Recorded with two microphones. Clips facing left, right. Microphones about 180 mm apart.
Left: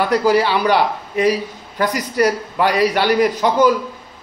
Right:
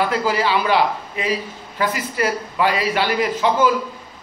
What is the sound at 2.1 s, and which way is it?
A man's voice, 40° left (ahead or behind).